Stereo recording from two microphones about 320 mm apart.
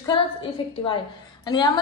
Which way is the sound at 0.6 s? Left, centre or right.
Centre.